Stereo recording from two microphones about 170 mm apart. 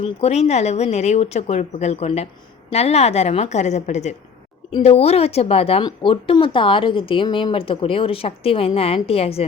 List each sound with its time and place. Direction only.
0.0 s speech: 40° left (ahead or behind)